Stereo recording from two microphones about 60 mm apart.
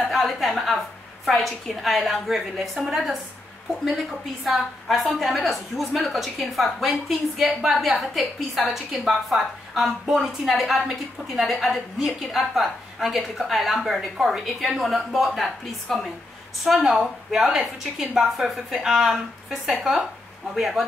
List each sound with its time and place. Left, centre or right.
0.1 s a woman's voice: centre
4.5 s a woman's voice: centre